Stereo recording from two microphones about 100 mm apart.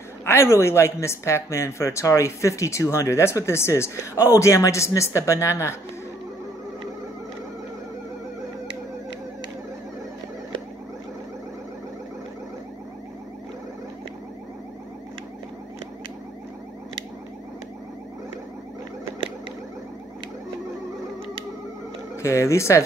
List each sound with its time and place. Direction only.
0.2 s speech: 25° left (ahead or behind)
22.1 s speech: 30° left (ahead or behind)